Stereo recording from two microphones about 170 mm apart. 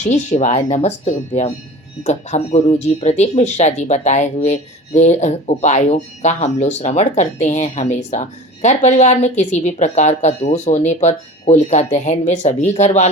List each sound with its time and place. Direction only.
0.0 s speech: 45° left (ahead or behind)